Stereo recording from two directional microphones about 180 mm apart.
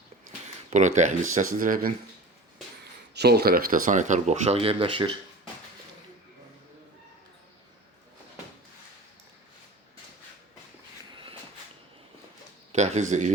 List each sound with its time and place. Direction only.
0.7 s speech: 40° right (ahead or behind)
3.2 s speech: 65° right (ahead or behind); by 5.1 s 30° right (ahead or behind)
11.1 s walk: 30° right (ahead or behind)
12.7 s speech: 40° right (ahead or behind)